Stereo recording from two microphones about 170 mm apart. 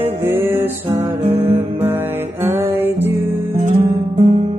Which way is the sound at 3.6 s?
40° right (ahead or behind).